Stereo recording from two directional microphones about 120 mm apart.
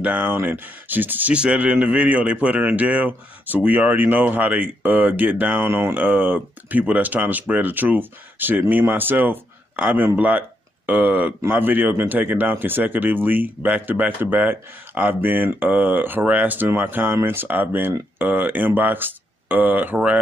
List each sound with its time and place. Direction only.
0.0 s a man's voice: 15° right (ahead or behind)